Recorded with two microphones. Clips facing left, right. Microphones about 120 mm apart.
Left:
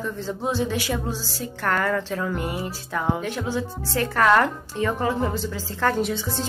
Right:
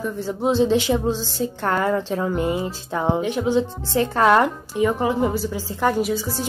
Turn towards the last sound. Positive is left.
turn(degrees=-5)  # may be behind; listen again after turning